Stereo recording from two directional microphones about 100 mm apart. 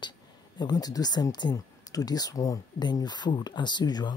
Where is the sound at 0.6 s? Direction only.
40° left (ahead or behind).